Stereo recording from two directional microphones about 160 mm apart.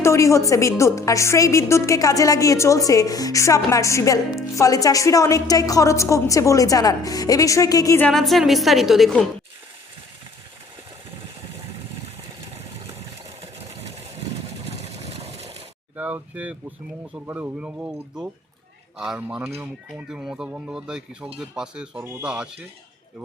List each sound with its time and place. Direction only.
0.0 s a woman's voice: 20° left (ahead or behind)
8.0 s speech: centre (ahead or behind)
13.4 s engine: 40° right (ahead or behind)
14.8 s a sound: 45° right (ahead or behind)
16.0 s speech: 10° right (ahead or behind)
18.9 s speech: 5° right (ahead or behind)